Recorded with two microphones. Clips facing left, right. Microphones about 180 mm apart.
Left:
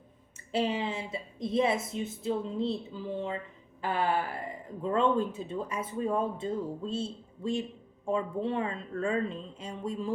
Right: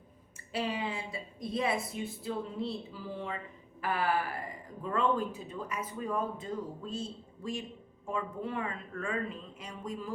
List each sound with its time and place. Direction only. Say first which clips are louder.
0.5 s a woman's voice: left 4 dB; 25° left (ahead or behind)